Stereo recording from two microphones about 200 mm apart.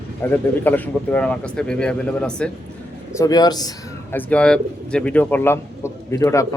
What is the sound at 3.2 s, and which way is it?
Speech, 20° left (ahead or behind).